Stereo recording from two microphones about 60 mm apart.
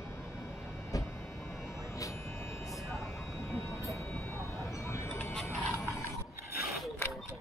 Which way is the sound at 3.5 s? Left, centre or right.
Left.